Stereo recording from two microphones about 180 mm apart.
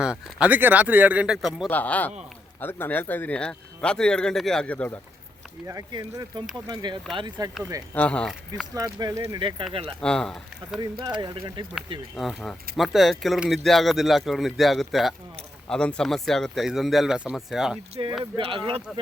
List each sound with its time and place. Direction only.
0.0 s speech: 5° right (ahead or behind)
5.6 s speech: 20° right (ahead or behind)
7.9 s speech: 5° left (ahead or behind)
8.7 s speech: 20° right (ahead or behind)
10.0 s speech: 5° left (ahead or behind)
10.8 s speech: 25° right (ahead or behind)
12.1 s speech: centre (ahead or behind)
18.2 s speech: 25° right (ahead or behind)